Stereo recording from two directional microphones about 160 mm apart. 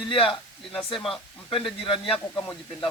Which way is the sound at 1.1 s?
35° left (ahead or behind).